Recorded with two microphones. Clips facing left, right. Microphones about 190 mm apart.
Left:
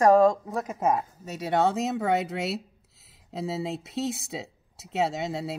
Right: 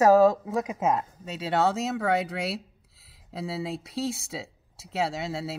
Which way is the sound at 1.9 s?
20° left (ahead or behind).